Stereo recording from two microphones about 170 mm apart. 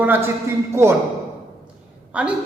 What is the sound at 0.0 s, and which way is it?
Speech, 10° right (ahead or behind).